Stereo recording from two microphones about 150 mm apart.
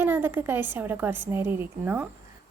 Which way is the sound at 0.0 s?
15° right (ahead or behind).